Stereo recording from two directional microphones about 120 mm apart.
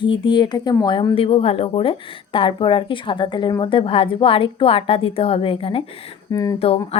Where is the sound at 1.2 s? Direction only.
50° left (ahead or behind).